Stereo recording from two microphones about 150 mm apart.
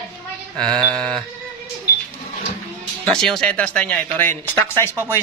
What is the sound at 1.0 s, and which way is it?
Sheep, 35° right (ahead or behind).